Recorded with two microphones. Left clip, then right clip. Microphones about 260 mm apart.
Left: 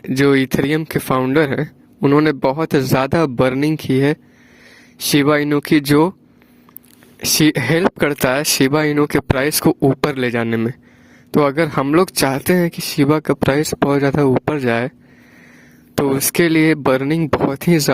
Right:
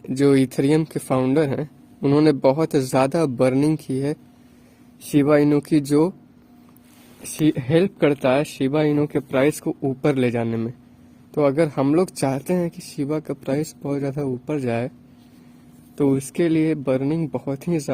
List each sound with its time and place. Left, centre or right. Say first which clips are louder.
0.0 s speech: left 3 dB; left
7.4 s speech: left 3 dB; left
16.0 s speech: left 5 dB; left